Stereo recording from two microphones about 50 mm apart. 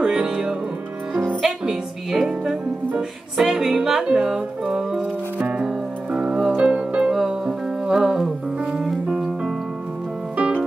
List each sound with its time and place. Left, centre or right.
0.0 s music: centre
1.7 s music: centre
6.1 s music: right
10.3 s music: right